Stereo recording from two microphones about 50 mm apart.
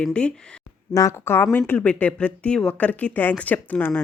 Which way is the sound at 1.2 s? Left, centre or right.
Left.